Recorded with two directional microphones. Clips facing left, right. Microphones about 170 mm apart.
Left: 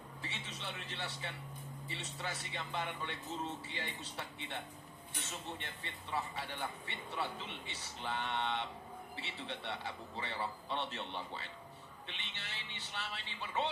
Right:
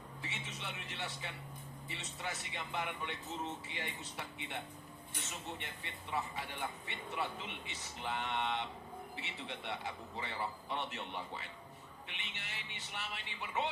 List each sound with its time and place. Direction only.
0.2 s a sound: 15° right (ahead or behind)
1.9 s a man's voice: 15° right (ahead or behind)
5.5 s a man's voice: 15° right (ahead or behind)